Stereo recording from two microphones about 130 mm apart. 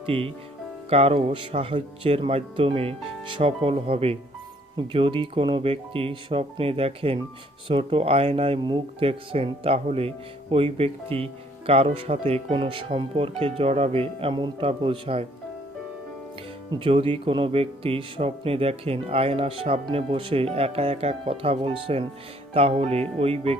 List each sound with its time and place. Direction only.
0.0 s speech: 45° right (ahead or behind)
8.6 s speech: 35° right (ahead or behind)
9.0 s speech: 50° right (ahead or behind)
16.7 s speech: 45° right (ahead or behind)